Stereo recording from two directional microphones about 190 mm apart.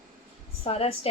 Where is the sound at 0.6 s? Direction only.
30° left (ahead or behind).